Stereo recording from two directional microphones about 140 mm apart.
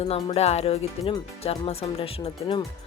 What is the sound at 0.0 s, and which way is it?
Speech, 50° left (ahead or behind).